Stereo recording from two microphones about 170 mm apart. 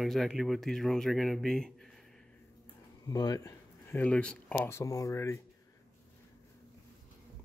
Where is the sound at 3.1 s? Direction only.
20° left (ahead or behind).